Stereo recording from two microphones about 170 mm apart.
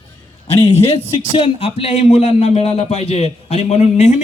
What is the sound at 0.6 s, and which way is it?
A man's voice, 30° left (ahead or behind).